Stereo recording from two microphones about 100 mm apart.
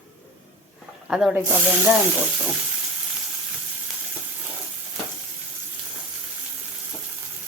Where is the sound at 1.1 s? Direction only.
5° right (ahead or behind).